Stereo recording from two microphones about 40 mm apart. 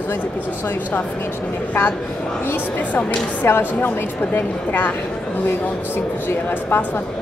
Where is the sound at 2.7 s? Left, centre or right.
Left.